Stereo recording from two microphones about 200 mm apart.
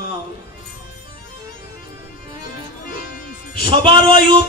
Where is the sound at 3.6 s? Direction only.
25° right (ahead or behind).